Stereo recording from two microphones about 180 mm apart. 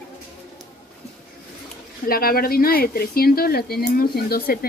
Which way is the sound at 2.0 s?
55° left (ahead or behind).